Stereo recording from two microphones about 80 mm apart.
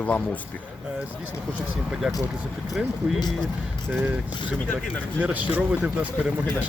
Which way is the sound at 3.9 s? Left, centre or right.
Right.